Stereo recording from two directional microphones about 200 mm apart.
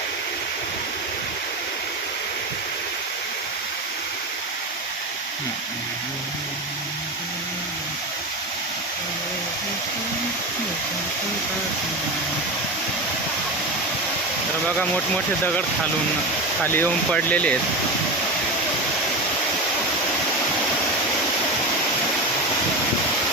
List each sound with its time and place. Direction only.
14.8 s speech: 5° left (ahead or behind)
16.6 s speech: 10° left (ahead or behind)